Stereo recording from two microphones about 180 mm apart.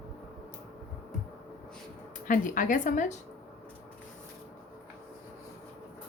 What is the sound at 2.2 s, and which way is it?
Speech, 50° left (ahead or behind).